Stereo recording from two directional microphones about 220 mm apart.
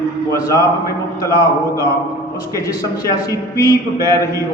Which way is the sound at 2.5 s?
15° left (ahead or behind).